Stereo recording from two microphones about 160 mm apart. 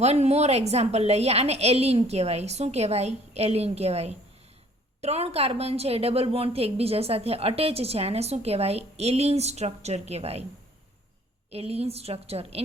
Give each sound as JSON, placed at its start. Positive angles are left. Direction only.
{"t": 0.0, "sound": "a woman's voice", "side_deg": -40}
{"t": 11.5, "sound": "a woman's voice", "side_deg": -40}